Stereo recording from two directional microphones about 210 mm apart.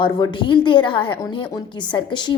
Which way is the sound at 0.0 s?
20° left (ahead or behind).